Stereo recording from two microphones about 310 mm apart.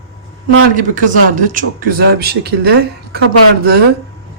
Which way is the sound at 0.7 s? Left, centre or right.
Right.